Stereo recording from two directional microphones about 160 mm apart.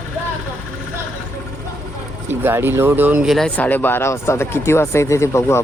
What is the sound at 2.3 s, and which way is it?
Speech, 15° right (ahead or behind).